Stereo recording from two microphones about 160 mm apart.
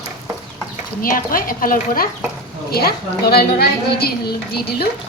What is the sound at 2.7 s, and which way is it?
A woman's voice, 75° left (ahead or behind).